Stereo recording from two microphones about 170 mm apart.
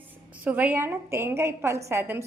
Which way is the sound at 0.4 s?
10° right (ahead or behind).